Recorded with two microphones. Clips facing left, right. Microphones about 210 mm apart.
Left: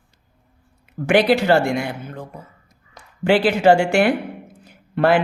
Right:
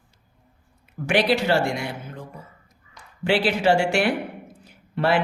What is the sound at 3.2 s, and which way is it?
Speech, 50° left (ahead or behind).